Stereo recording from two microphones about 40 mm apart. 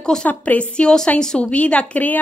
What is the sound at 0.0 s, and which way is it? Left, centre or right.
Speech, centre.